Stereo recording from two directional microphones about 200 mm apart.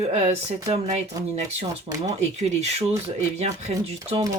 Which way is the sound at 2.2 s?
35° right (ahead or behind).